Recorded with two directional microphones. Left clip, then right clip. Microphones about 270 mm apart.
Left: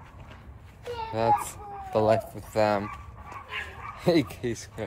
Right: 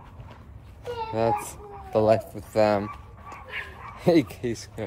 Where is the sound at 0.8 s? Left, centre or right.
Centre.